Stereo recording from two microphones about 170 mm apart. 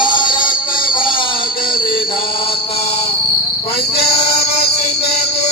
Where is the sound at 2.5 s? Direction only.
35° left (ahead or behind).